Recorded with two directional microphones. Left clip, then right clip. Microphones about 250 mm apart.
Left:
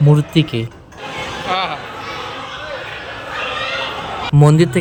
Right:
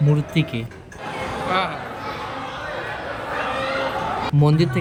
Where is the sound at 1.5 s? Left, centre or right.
Centre.